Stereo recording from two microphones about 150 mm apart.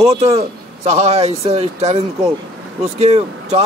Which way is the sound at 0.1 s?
45° right (ahead or behind).